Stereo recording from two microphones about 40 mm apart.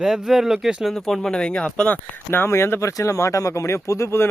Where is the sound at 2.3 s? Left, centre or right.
Left.